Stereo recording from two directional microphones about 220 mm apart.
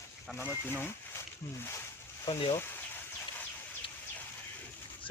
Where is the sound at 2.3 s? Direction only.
25° left (ahead or behind).